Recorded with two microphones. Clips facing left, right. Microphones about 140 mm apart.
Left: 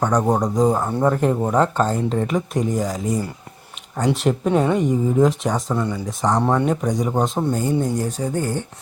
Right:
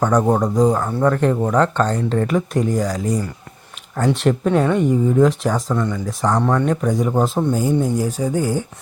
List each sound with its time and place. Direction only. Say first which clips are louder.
0.3 s speech: right 2 dB; 20° left (ahead or behind); by 5.7 s centre (ahead or behind)
5.7 s speech: right 2 dB; 15° left (ahead or behind)
6.7 s speech: right 2 dB; centre (ahead or behind)